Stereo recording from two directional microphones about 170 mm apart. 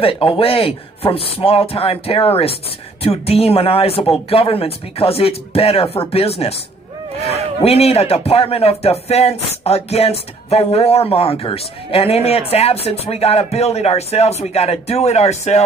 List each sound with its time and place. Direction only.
0.0 s speech: 35° left (ahead or behind)
7.6 s speech: 35° left (ahead or behind)